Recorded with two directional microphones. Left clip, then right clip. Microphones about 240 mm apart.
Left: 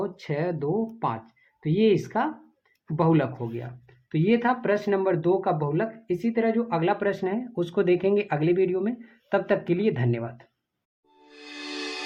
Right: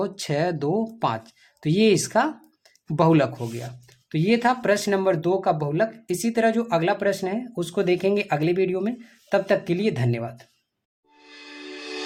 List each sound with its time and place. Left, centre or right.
0.0 s speech: right
11.3 s music: centre